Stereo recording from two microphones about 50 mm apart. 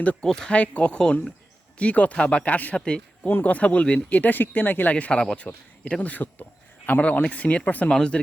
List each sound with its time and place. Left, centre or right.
0.0 s speech: left
0.3 s speech: centre
0.5 s speech: left
1.8 s speech: left
2.7 s speech: centre
4.2 s speech: left
5.1 s speech: centre
5.9 s speech: left
7.9 s speech: centre